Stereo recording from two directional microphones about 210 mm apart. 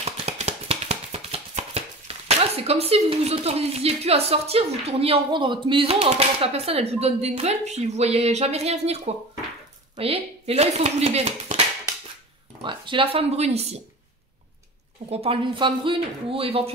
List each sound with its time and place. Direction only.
0.0 s a sound: 30° right (ahead or behind)
9.9 s speech: 25° right (ahead or behind)
12.6 s speech: 25° right (ahead or behind)
15.0 s speech: 30° right (ahead or behind)